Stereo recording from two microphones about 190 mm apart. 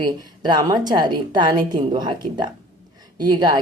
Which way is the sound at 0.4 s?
20° right (ahead or behind).